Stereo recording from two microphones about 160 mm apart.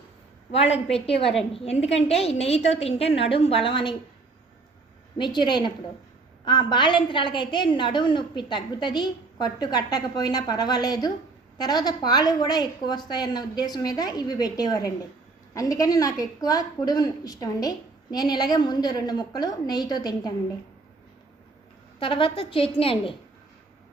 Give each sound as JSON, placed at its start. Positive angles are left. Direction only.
{"t": 0.5, "sound": "a woman's voice", "side_deg": 40}
{"t": 5.1, "sound": "a woman's voice", "side_deg": 30}
{"t": 21.9, "sound": "a woman's voice", "side_deg": 35}